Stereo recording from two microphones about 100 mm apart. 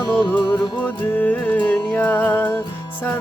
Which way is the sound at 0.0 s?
45° left (ahead or behind).